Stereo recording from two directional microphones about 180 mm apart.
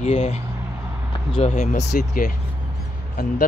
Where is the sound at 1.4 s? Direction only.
35° left (ahead or behind).